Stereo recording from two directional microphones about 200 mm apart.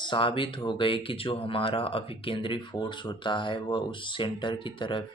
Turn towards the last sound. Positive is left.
turn(degrees=25)  # may be behind; listen again after turning